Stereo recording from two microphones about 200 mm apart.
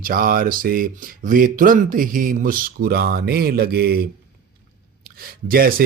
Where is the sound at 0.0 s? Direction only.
45° right (ahead or behind).